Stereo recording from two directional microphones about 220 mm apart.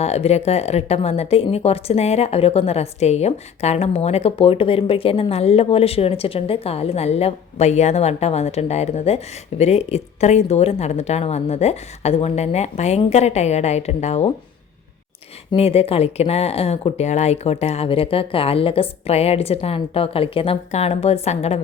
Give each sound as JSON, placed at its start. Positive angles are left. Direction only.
{"t": 0.0, "sound": "speech", "side_deg": 30}
{"t": 15.5, "sound": "speech", "side_deg": 25}